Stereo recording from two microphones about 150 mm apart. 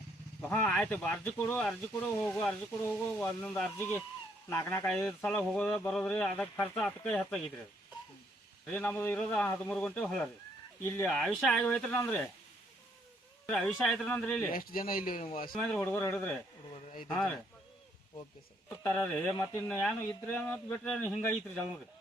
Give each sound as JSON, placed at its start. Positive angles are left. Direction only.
{"t": 0.4, "sound": "a man's voice", "side_deg": 10}
{"t": 8.6, "sound": "speech", "side_deg": 5}
{"t": 10.8, "sound": "speech", "side_deg": 15}
{"t": 11.1, "sound": "speech", "side_deg": 5}
{"t": 13.5, "sound": "a man's voice", "side_deg": 5}
{"t": 14.5, "sound": "speech", "side_deg": 70}
{"t": 15.5, "sound": "speech", "side_deg": 10}
{"t": 16.7, "sound": "speech", "side_deg": 60}
{"t": 17.1, "sound": "a man's voice", "side_deg": 5}
{"t": 18.8, "sound": "speech", "side_deg": 10}